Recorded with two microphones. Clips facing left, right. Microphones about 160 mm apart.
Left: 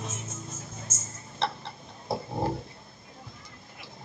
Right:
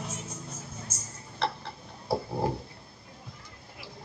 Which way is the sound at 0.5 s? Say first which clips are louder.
Even; 65° right (ahead or behind).